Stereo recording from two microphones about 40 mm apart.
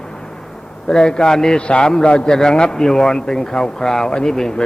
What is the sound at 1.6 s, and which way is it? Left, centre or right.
A man's voice, left.